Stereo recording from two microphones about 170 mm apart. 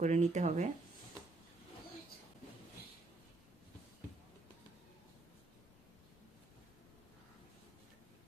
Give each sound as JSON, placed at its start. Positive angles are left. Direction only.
{"t": 0.0, "sound": "speech", "side_deg": -45}